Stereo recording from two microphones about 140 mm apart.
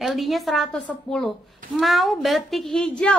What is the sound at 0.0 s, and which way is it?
A woman's voice, centre (ahead or behind).